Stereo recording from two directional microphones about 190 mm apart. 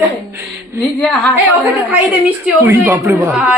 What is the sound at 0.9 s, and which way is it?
Speech, centre (ahead or behind).